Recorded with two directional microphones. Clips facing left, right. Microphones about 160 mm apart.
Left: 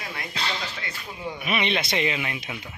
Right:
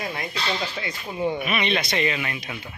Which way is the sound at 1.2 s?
25° right (ahead or behind).